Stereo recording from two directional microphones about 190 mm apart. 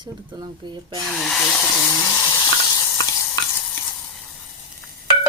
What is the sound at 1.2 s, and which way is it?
Speech, centre (ahead or behind).